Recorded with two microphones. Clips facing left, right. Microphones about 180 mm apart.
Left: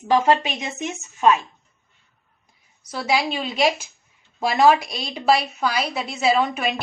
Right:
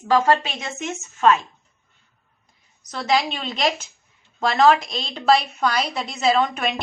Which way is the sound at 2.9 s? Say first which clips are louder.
Right 1 dB; 10° left (ahead or behind).